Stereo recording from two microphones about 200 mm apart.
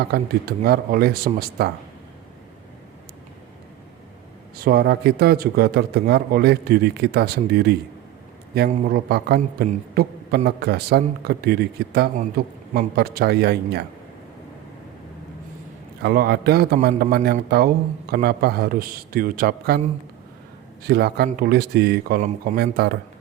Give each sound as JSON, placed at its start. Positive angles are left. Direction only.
{"t": 0.1, "sound": "a man's voice", "side_deg": -50}
{"t": 4.5, "sound": "a man's voice", "side_deg": -50}
{"t": 16.0, "sound": "a man's voice", "side_deg": -50}
{"t": 20.8, "sound": "a man's voice", "side_deg": -50}